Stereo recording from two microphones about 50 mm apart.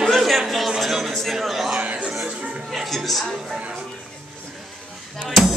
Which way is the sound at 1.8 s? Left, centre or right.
Right.